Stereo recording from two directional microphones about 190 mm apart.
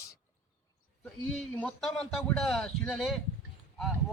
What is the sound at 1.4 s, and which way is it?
Speech, 5° left (ahead or behind).